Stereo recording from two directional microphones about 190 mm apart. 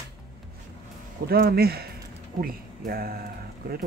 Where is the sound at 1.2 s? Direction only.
55° right (ahead or behind).